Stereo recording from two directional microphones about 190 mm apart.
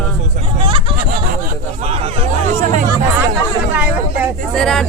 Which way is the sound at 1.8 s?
30° right (ahead or behind).